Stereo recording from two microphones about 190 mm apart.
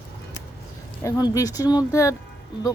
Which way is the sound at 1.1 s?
20° left (ahead or behind).